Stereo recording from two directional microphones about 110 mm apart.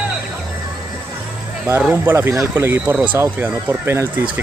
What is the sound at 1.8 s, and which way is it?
Speech, 15° right (ahead or behind).